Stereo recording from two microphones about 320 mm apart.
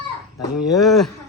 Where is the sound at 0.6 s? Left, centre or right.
Centre.